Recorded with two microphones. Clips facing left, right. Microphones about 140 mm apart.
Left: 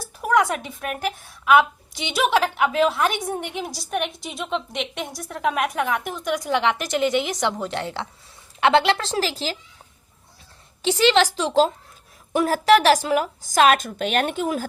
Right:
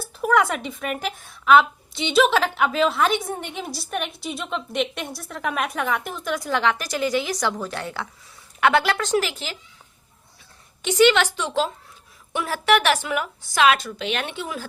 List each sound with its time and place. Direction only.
0.0 s a woman's voice: 10° left (ahead or behind); by 9.6 s 35° left (ahead or behind)
10.8 s speech: 35° left (ahead or behind)